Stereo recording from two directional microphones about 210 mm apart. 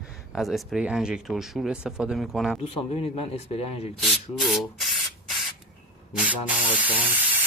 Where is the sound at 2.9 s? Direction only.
30° left (ahead or behind).